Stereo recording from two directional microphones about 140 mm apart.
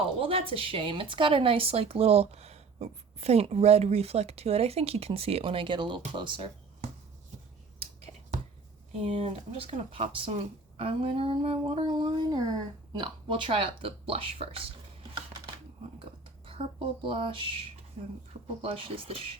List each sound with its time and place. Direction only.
0.2 s speech: 40° right (ahead or behind)
9.0 s speech: 45° right (ahead or behind)
16.5 s speech: 40° right (ahead or behind)